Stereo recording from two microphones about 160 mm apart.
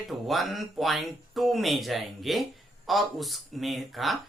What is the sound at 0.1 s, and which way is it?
Speech, centre (ahead or behind).